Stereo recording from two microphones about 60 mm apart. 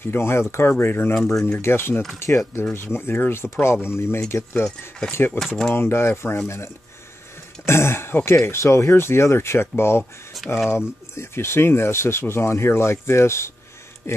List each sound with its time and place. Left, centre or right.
0.0 s speech: left
1.1 s speech: centre
1.6 s speech: left
2.1 s speech: left
2.7 s speech: left
10.4 s speech: centre
11.1 s speech: left
14.0 s a sound: left